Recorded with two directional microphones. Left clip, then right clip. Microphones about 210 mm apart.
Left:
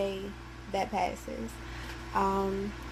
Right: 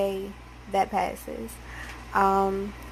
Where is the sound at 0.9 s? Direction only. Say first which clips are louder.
Right 4 dB; 20° right (ahead or behind).